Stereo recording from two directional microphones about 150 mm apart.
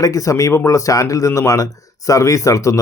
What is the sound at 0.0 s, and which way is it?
Speech, 20° left (ahead or behind).